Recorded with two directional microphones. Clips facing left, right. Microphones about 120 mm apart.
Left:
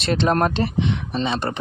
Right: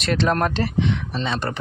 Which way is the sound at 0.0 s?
25° left (ahead or behind).